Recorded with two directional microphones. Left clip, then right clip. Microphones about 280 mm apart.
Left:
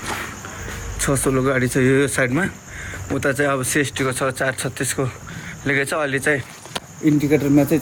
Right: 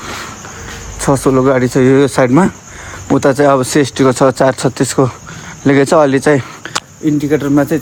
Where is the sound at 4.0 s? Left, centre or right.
Right.